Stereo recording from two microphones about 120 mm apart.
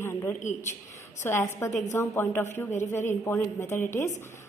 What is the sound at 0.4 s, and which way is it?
Speech, 90° left.